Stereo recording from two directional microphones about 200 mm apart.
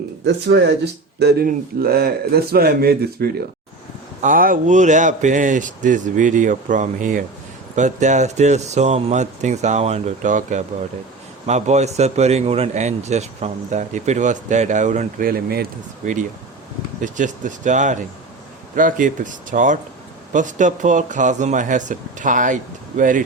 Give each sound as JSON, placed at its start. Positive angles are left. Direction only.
{"t": 0.3, "sound": "a man's voice", "side_deg": -60}
{"t": 17.0, "sound": "a man's voice", "side_deg": -40}